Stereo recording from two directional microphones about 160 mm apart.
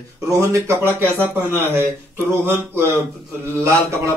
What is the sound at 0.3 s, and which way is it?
A man's voice, 20° right (ahead or behind).